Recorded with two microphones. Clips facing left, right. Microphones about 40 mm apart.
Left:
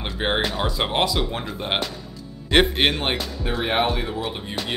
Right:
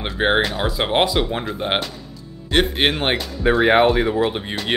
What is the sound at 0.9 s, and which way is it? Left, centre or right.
Speech, right.